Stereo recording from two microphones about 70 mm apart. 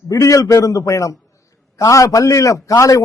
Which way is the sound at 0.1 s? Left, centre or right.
Left.